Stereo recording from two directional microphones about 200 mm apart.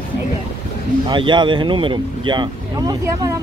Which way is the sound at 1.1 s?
25° right (ahead or behind).